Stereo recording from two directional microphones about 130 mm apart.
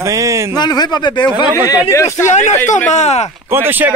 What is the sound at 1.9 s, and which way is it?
Speech, 25° left (ahead or behind).